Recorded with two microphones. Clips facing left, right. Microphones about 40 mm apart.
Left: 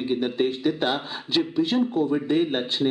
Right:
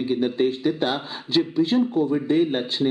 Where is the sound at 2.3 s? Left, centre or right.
Left.